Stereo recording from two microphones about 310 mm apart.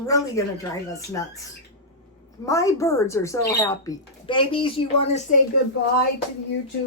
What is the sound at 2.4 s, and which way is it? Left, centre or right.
Speech, centre.